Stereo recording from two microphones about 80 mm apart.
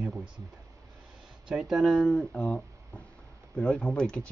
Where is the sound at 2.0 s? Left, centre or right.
Centre.